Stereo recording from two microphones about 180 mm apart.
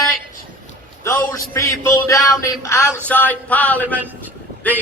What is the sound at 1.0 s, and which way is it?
A man's voice, 15° left (ahead or behind).